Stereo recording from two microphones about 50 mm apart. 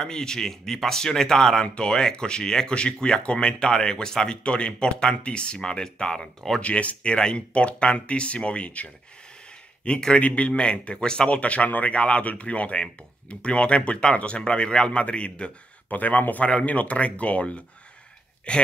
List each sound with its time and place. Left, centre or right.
0.0 s speech: centre
15.9 s speech: left